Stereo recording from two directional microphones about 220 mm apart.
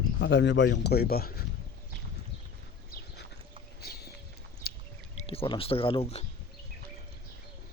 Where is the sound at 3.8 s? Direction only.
45° left (ahead or behind).